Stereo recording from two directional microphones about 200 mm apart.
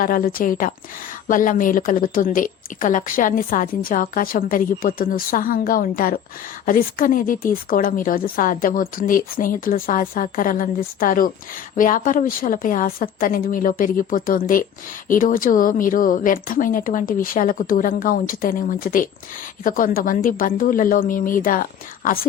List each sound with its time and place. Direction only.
0.0 s a woman's voice: 45° left (ahead or behind)